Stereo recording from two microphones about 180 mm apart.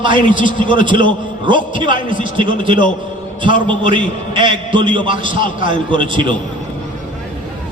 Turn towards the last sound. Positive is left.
turn(degrees=-25)  # may be behind; listen again after turning